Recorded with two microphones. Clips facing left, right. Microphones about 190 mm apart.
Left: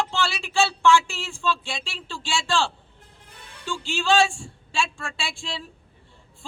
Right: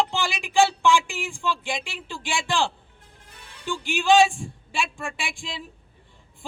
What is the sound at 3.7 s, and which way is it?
Speech, 15° right (ahead or behind).